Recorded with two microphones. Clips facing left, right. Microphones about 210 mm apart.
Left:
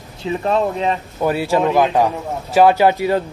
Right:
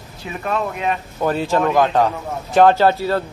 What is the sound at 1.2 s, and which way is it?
Speech, 10° left (ahead or behind).